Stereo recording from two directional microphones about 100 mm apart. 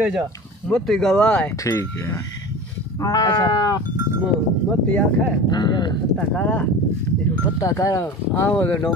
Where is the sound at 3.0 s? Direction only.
40° left (ahead or behind).